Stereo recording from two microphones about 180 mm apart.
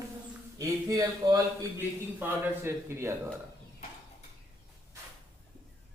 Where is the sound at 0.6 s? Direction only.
20° right (ahead or behind).